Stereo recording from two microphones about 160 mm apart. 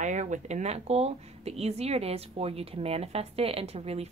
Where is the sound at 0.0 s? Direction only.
50° right (ahead or behind).